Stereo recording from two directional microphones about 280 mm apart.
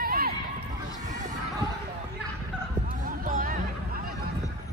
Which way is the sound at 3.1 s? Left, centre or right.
Right.